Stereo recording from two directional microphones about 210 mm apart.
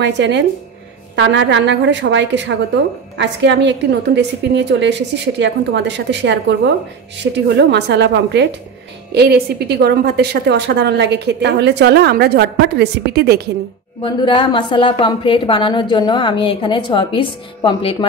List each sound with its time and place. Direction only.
0.0 s a woman's voice: 55° right (ahead or behind)
14.0 s a woman's voice: 20° left (ahead or behind)